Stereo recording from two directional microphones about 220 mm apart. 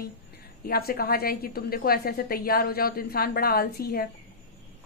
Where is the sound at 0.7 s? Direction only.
45° left (ahead or behind).